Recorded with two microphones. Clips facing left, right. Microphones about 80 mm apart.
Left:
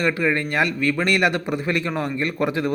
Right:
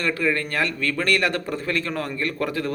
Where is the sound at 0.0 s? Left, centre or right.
Centre.